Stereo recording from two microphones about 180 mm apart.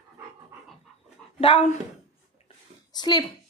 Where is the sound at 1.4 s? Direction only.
30° left (ahead or behind).